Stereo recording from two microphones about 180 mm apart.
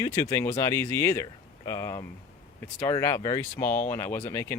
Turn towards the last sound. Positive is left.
turn(degrees=15)  # may be behind; listen again after turning